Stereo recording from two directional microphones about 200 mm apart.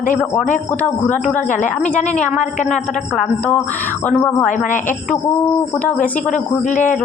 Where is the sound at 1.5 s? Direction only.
40° left (ahead or behind).